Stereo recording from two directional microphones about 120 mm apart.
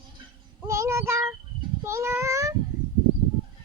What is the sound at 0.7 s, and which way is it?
Child singing, 20° right (ahead or behind).